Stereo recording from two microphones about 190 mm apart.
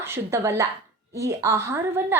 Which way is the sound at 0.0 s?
15° right (ahead or behind).